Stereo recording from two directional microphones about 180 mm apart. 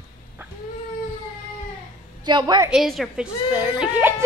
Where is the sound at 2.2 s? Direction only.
25° right (ahead or behind).